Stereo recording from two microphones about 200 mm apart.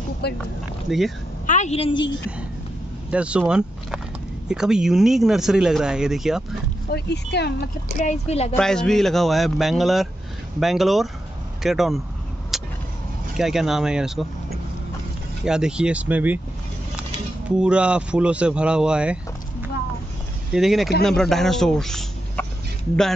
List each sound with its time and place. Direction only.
0.2 s speech: 55° left (ahead or behind)
0.8 s speech: centre (ahead or behind)
1.4 s a woman's voice: 35° left (ahead or behind)
3.1 s speech: 5° right (ahead or behind)
6.9 s speech: 55° left (ahead or behind)
8.0 s speech: 30° left (ahead or behind)
8.5 s speech: 5° left (ahead or behind)
12.5 s vehicle: centre (ahead or behind)
13.4 s speech: centre (ahead or behind)
15.4 s speech: 5° right (ahead or behind)
17.5 s speech: 5° right (ahead or behind)
20.5 s a man's voice: centre (ahead or behind)